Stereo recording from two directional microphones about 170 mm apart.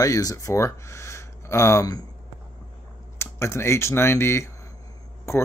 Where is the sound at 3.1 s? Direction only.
15° left (ahead or behind).